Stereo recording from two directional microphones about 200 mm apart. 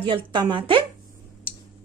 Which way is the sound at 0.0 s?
25° right (ahead or behind).